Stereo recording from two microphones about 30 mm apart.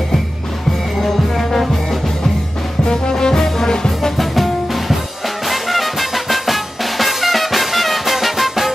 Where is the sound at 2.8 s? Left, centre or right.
Left.